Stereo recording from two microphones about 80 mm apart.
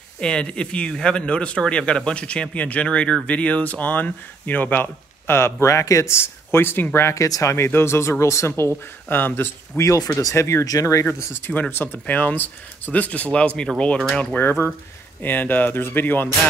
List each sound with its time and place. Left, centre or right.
0.2 s speech: centre; by 7.2 s left
7.2 s speech: left
7.5 s speech: left
9.8 s speech: left
11.4 s speech: left
14.1 s speech: left